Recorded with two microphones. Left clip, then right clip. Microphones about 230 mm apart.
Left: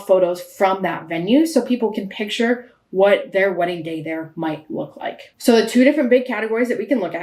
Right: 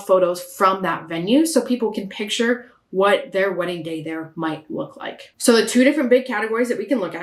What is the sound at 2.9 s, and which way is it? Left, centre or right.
Speech, right.